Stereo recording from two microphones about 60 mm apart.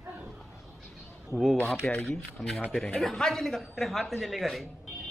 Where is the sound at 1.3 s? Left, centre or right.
Centre.